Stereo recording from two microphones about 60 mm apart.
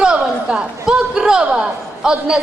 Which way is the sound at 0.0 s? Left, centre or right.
Centre.